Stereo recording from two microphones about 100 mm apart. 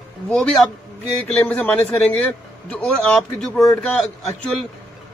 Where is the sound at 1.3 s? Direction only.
15° left (ahead or behind).